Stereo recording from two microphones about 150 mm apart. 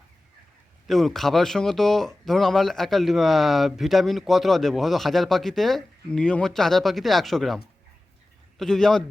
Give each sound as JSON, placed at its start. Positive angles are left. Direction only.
{"t": 0.9, "sound": "speech", "side_deg": 0}